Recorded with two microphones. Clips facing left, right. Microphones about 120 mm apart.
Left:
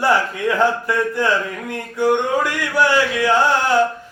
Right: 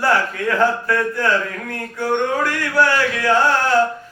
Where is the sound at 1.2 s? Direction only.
20° left (ahead or behind).